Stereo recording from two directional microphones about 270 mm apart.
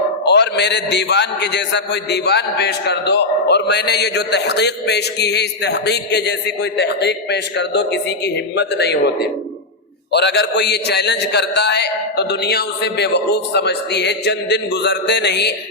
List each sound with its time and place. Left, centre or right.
0.3 s a man's voice: left